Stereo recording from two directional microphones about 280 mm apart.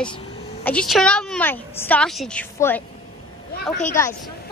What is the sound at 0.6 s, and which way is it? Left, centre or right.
A woman's voice, centre.